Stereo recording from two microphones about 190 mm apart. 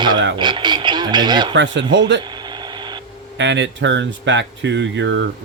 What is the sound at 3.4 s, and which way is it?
Speech, 70° right (ahead or behind).